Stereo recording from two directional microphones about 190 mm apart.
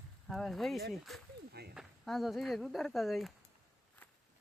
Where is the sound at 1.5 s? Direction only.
60° right (ahead or behind).